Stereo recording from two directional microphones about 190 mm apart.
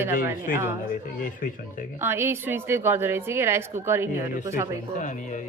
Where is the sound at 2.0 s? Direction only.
10° right (ahead or behind).